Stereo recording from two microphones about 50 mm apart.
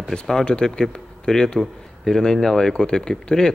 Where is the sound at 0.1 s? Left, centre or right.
Centre.